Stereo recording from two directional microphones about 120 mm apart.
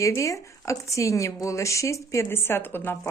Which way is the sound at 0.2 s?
25° left (ahead or behind).